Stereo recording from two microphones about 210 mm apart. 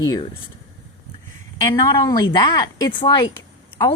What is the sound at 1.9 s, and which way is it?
Speech, 20° left (ahead or behind).